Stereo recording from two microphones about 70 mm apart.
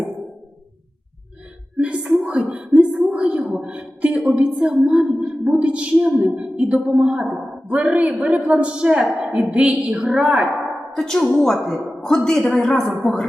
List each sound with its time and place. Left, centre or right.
1.8 s a woman's voice: centre
10.9 s a woman's voice: centre